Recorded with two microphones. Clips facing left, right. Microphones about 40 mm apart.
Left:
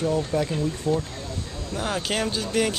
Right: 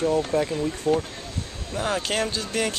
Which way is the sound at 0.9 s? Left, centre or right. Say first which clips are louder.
Right 3 dB; right.